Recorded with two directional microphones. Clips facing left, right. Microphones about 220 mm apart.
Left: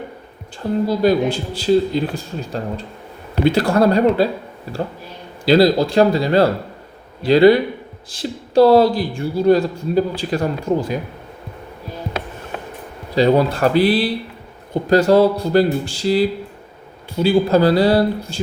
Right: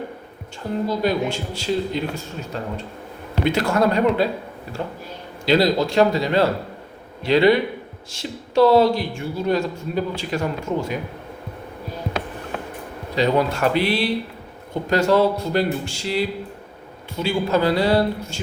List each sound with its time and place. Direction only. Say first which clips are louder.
0.9 s speech: left 6 dB; 35° left (ahead or behind)
5.5 s speech: left 5 dB; 35° left (ahead or behind)
13.1 s speech: left 5 dB; 35° left (ahead or behind)